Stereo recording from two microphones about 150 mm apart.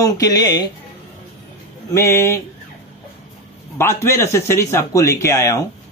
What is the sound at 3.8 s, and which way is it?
A man's voice, 15° left (ahead or behind).